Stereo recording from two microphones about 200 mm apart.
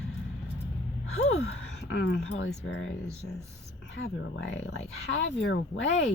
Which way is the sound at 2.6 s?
75° left (ahead or behind).